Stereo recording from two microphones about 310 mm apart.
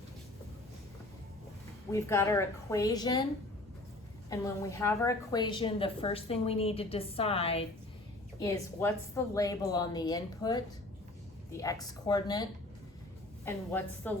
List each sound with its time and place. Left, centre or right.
1.9 s a woman's voice: centre
4.3 s a woman's voice: centre